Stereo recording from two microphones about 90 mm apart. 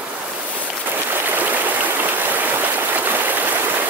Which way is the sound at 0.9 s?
20° right (ahead or behind).